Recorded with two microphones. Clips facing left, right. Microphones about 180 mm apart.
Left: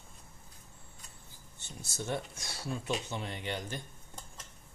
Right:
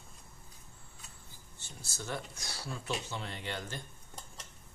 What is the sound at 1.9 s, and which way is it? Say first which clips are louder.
Speech: left 4 dB; 25° left (ahead or behind).